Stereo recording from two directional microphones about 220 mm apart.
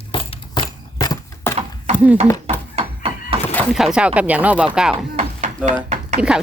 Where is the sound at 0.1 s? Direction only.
20° left (ahead or behind).